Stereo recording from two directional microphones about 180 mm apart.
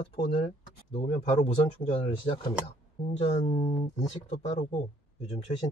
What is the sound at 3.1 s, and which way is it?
Speech, 35° left (ahead or behind).